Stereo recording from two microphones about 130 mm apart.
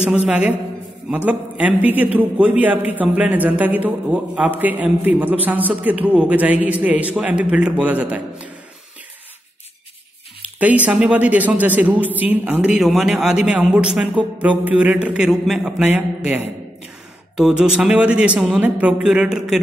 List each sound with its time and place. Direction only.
0.0 s speech: 5° right (ahead or behind)
10.4 s speech: 10° right (ahead or behind)
17.4 s speech: 5° right (ahead or behind)